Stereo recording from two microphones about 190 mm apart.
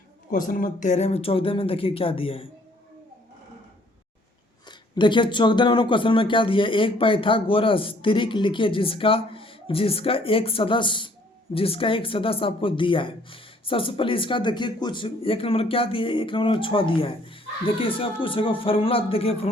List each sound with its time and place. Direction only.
0.3 s speech: 45° left (ahead or behind); by 2.5 s 30° left (ahead or behind)
4.6 s speech: 25° left (ahead or behind)